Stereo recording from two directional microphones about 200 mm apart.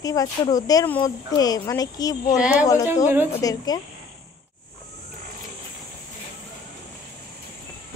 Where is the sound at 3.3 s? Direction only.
15° left (ahead or behind).